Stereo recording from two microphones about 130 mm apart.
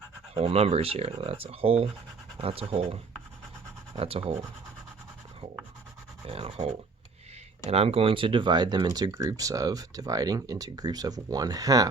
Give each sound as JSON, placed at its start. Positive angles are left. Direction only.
{"t": 0.3, "sound": "speech", "side_deg": -50}
{"t": 6.2, "sound": "speech", "side_deg": -45}